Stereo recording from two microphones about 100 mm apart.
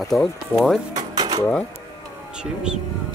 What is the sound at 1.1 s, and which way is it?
Dishes, 40° right (ahead or behind).